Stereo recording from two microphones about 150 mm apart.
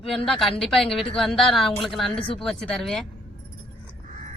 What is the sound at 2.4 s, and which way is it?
Speech, 5° left (ahead or behind).